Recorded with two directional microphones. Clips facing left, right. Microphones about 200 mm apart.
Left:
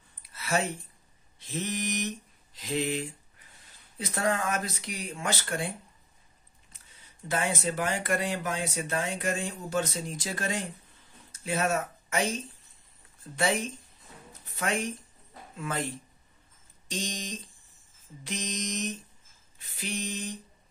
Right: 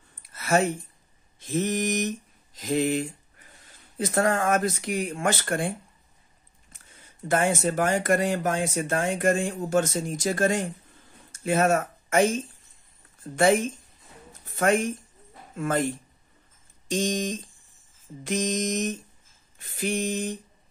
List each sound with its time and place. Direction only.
0.3 s a sound: 50° right (ahead or behind)
1.4 s mantra: 45° right (ahead or behind)
4.0 s speech: 50° right (ahead or behind)
7.2 s speech: 50° right (ahead or behind)
14.6 s speech: 50° right (ahead or behind)
16.9 s speech: 50° right (ahead or behind)